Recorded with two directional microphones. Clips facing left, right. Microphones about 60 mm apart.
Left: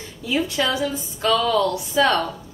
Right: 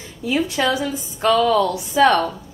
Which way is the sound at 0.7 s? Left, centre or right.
Right.